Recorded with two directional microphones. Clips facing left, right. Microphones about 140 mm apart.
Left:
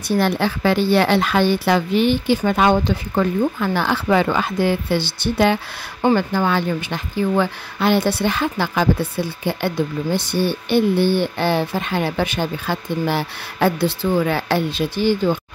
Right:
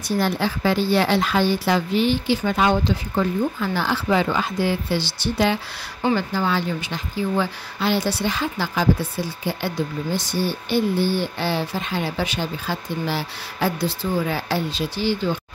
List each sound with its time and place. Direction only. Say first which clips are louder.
0.2 s a woman's voice: left 2 dB; 65° left (ahead or behind)